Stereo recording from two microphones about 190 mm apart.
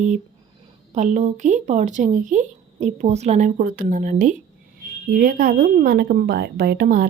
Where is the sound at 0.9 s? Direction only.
40° right (ahead or behind).